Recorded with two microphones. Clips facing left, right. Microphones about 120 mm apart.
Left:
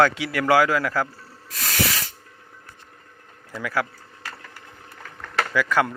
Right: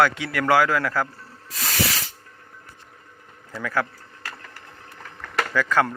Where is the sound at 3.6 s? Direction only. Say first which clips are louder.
Even; 10° left (ahead or behind).